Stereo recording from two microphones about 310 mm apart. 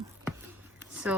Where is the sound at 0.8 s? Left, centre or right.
Centre.